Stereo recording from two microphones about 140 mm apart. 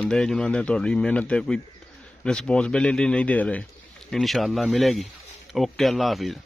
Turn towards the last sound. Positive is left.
turn(degrees=0)  # may be behind; listen again after turning